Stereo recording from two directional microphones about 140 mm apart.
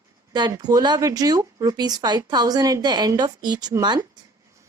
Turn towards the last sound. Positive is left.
turn(degrees=-30)  # may be behind; listen again after turning